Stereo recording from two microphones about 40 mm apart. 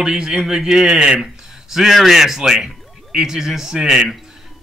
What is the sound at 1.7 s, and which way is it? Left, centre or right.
Speech, centre.